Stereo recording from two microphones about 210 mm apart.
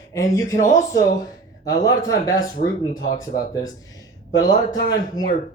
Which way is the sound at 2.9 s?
40° left (ahead or behind).